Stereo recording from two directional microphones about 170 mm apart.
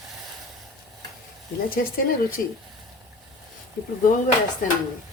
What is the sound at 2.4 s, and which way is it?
Speech, 55° left (ahead or behind).